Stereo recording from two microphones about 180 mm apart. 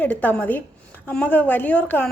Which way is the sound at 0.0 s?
10° left (ahead or behind).